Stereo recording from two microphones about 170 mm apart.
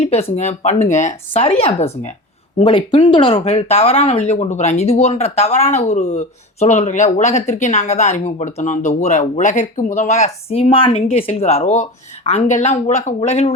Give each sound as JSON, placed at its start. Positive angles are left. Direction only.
{"t": 0.0, "sound": "speech", "side_deg": 40}